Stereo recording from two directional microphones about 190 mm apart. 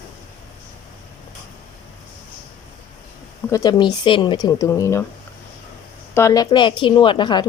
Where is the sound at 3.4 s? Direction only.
15° left (ahead or behind).